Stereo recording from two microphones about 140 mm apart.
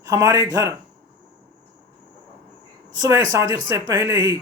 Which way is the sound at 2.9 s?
25° right (ahead or behind).